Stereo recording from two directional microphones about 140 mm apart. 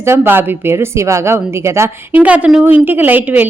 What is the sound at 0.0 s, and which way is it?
A woman's voice, 15° right (ahead or behind).